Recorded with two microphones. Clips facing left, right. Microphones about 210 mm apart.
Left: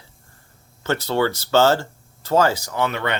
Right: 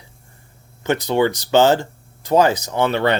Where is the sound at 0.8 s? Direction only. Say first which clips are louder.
Right 3 dB; 15° right (ahead or behind).